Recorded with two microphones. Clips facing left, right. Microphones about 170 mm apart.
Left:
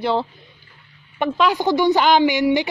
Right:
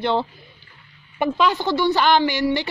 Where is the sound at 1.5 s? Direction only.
15° left (ahead or behind).